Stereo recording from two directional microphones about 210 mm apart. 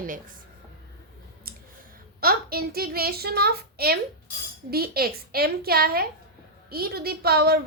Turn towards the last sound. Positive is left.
turn(degrees=-45)  # may be behind; listen again after turning